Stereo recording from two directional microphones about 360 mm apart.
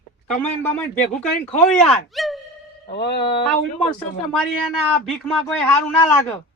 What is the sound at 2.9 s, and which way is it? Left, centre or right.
Speech, left.